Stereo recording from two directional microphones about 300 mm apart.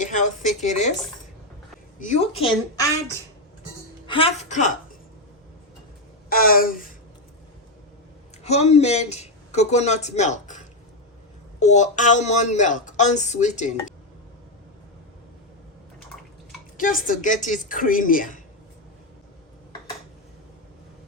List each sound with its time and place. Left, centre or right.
0.0 s speech: left
2.0 s speech: left
4.0 s a woman's voice: centre
6.2 s speech: left
8.4 s speech: left
11.6 s speech: left
16.7 s speech: left